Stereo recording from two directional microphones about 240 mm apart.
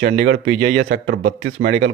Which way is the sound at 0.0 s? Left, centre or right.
Right.